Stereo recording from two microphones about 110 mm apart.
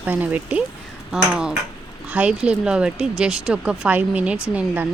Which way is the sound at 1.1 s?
5° right (ahead or behind).